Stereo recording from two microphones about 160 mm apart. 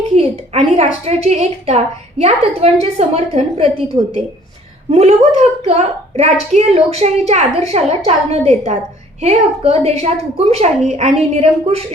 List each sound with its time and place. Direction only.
0.2 s a woman's voice: 40° right (ahead or behind)
4.9 s a woman's voice: 40° right (ahead or behind)